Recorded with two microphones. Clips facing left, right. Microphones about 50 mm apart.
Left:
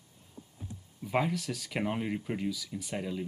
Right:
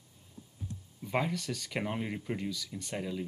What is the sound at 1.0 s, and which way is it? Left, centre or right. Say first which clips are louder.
Speech: left 2 dB; centre.